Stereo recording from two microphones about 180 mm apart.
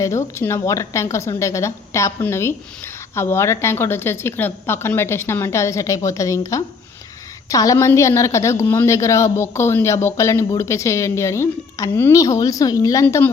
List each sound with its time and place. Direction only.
0.0 s a woman's voice: 15° left (ahead or behind)